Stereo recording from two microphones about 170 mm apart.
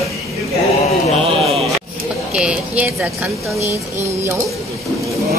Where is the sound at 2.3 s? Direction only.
5° right (ahead or behind).